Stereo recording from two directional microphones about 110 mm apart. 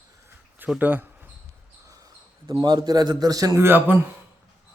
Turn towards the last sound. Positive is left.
turn(degrees=-20)  # may be behind; listen again after turning